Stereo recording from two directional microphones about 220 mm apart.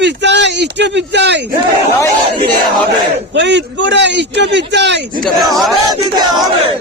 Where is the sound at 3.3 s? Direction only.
55° right (ahead or behind).